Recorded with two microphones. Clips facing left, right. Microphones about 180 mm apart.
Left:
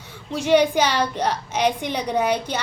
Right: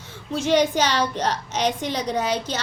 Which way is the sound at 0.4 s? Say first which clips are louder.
Left 2 dB; 15° left (ahead or behind).